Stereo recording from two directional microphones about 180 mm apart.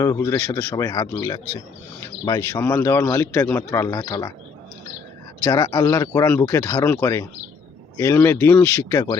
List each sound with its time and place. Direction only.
0.0 s a man's voice: 15° left (ahead or behind)
5.5 s a man's voice: 20° left (ahead or behind)